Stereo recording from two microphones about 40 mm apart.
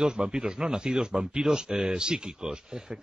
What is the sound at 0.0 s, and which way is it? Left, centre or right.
Speech, centre.